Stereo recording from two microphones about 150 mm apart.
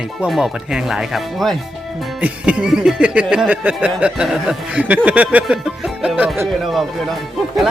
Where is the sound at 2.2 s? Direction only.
5° right (ahead or behind).